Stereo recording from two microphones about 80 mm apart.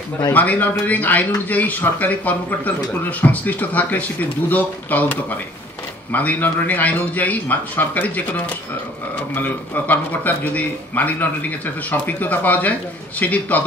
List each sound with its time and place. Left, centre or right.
0.3 s speech: left